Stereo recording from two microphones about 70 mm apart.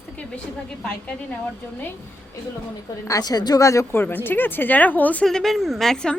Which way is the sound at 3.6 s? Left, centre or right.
Left.